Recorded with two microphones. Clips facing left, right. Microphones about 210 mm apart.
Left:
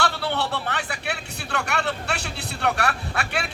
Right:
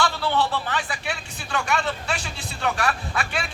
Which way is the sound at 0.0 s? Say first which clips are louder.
Right 2 dB; 65° left (ahead or behind).